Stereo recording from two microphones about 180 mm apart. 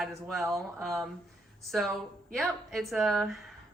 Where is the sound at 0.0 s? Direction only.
Centre (ahead or behind).